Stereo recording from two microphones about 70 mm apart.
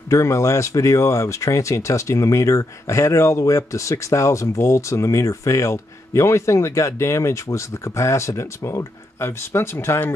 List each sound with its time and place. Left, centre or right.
0.1 s speech: left